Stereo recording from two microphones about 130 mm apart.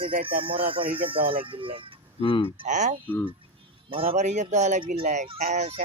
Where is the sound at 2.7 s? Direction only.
65° right (ahead or behind).